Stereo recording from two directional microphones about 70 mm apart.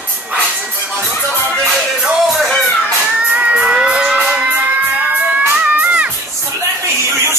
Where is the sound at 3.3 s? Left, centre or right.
Centre.